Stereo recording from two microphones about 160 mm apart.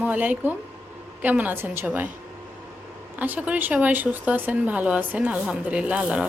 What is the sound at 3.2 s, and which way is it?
Speech, 10° right (ahead or behind).